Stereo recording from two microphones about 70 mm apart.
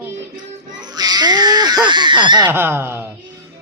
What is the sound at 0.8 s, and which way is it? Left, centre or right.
Baby cry, right.